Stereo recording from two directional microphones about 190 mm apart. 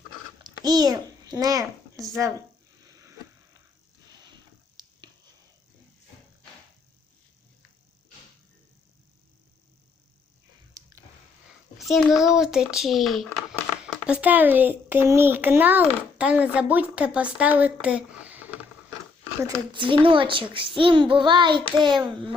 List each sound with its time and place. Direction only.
0.4 s a child's voice: 20° right (ahead or behind)
4.8 s a sound: 20° right (ahead or behind)
11.8 s a child's voice: centre (ahead or behind)
19.4 s a child's voice: 20° right (ahead or behind)